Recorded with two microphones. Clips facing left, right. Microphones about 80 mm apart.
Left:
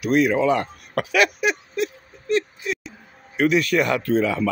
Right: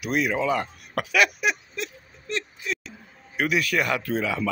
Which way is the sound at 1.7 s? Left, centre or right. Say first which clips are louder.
Left 9 dB; centre.